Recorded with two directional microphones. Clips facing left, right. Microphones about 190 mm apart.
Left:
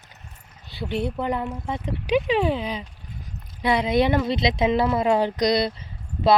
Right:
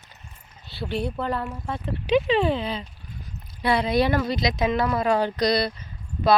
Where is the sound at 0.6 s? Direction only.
15° left (ahead or behind).